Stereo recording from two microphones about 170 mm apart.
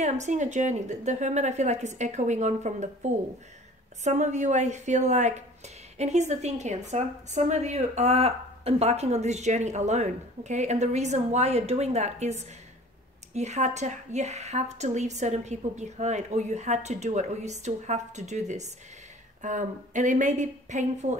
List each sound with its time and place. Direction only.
0.0 s a woman's voice: 45° right (ahead or behind)